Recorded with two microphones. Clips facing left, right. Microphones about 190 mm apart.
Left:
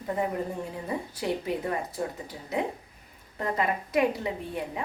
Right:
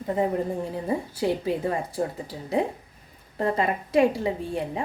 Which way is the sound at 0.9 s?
30° right (ahead or behind).